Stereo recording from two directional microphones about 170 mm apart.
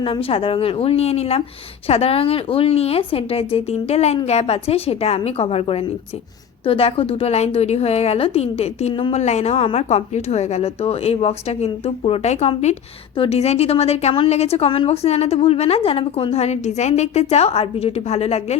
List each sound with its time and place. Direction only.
0.0 s a woman's voice: 30° left (ahead or behind)